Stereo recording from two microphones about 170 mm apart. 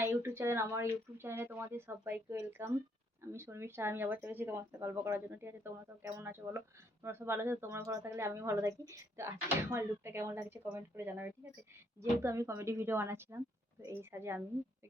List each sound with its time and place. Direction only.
0.0 s speech: 15° right (ahead or behind)